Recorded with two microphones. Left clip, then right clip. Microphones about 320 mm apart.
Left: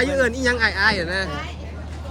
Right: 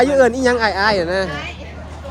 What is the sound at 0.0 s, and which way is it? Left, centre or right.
Speech, centre.